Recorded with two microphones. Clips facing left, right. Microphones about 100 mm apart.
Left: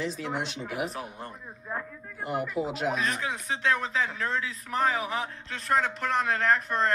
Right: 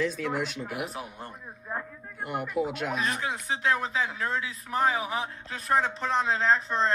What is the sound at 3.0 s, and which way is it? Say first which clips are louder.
Speech: even; 30° right (ahead or behind).